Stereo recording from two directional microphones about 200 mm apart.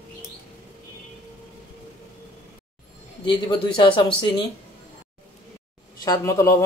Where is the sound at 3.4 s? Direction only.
25° left (ahead or behind).